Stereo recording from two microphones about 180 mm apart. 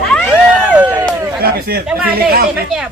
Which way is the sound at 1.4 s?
55° right (ahead or behind).